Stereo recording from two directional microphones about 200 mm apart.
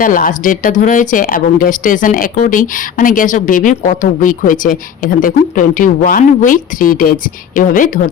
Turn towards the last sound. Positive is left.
turn(degrees=45)  # may be behind; listen again after turning